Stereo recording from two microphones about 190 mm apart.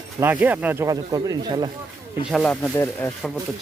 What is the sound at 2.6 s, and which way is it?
Speech, 10° left (ahead or behind).